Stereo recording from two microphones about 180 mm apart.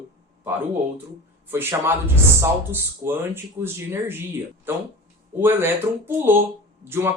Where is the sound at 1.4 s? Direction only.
10° right (ahead or behind).